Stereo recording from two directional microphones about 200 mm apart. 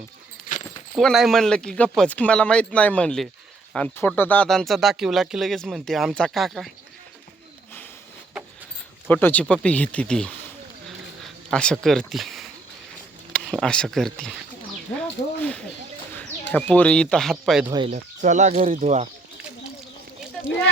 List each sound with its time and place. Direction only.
0.9 s speech: centre (ahead or behind)
9.0 s speech: 10° left (ahead or behind)
10.8 s a sound: centre (ahead or behind)
13.3 s speech: 5° left (ahead or behind)
15.4 s speech: 5° left (ahead or behind)
17.7 s speech: 25° right (ahead or behind)
17.9 s speech: 35° right (ahead or behind)